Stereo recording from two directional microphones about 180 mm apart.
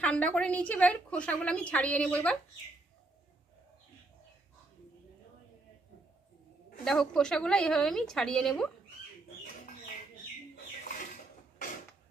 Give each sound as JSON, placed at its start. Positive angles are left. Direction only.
{"t": 0.0, "sound": "a woman's voice", "side_deg": 5}
{"t": 6.8, "sound": "a woman's voice", "side_deg": 5}